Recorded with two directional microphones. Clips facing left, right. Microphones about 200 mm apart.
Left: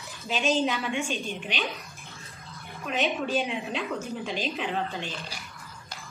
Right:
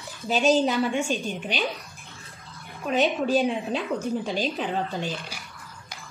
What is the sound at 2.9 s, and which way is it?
A woman's voice, 35° right (ahead or behind).